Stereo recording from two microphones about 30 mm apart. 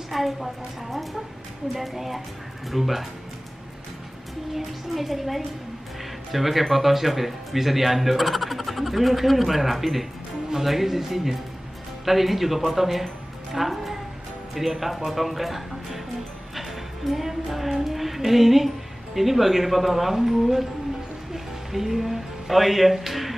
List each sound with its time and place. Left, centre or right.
0.1 s speech: centre
4.6 s speech: centre
13.0 s music: centre
14.5 s speech: centre
16.5 s music: centre
17.8 s speech: centre
21.3 s music: centre